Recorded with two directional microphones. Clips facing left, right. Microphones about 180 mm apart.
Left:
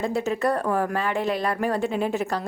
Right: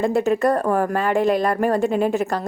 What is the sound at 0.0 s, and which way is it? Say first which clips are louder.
Speech: right 6 dB; 55° right (ahead or behind).